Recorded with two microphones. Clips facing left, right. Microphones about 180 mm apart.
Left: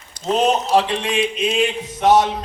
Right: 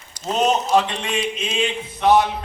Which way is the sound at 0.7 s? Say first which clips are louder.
Left 1 dB; 30° left (ahead or behind).